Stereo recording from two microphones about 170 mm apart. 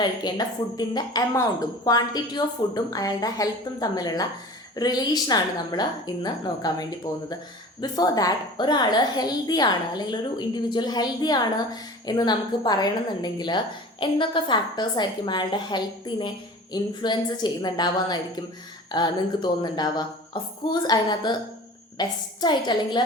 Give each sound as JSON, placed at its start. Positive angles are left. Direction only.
{"t": 0.0, "sound": "a woman's voice", "side_deg": 25}